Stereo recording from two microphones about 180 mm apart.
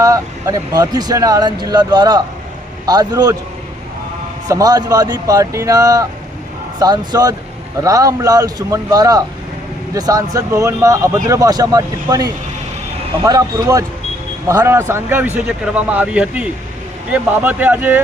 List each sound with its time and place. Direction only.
0.0 s speech: 20° right (ahead or behind)
4.4 s speech: 20° right (ahead or behind)